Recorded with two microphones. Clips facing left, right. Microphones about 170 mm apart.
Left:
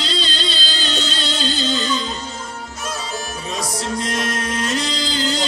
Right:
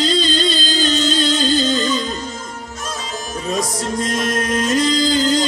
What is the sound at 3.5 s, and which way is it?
Music, 45° right (ahead or behind).